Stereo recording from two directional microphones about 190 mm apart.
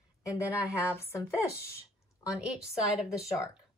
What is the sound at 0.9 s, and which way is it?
Speech, 15° left (ahead or behind).